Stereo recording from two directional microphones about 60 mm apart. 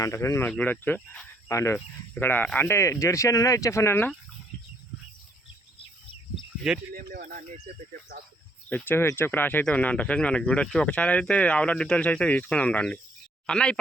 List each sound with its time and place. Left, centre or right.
0.0 s speech: left
0.5 s speech: left
1.5 s speech: left
2.1 s speech: left
2.6 s speech: left
8.7 s speech: left
9.6 s speech: left